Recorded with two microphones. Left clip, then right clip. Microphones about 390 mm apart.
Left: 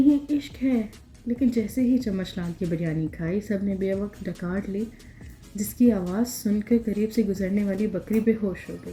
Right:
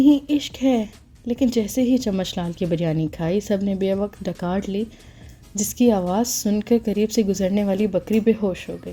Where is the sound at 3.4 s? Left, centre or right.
Right.